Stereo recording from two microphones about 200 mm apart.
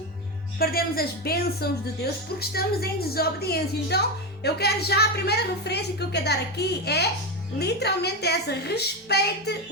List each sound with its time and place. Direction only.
0.6 s a woman's voice: 50° left (ahead or behind)